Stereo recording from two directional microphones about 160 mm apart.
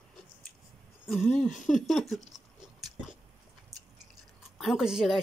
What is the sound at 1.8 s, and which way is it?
Speech, centre (ahead or behind).